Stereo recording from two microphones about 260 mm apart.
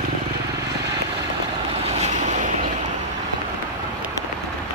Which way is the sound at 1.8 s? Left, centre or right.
Right.